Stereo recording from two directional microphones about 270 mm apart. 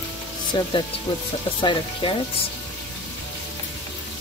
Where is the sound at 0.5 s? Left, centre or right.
Centre.